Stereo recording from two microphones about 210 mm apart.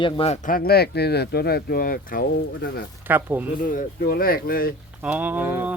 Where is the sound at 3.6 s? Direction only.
40° left (ahead or behind).